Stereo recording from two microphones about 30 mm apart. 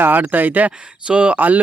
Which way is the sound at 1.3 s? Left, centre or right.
Right.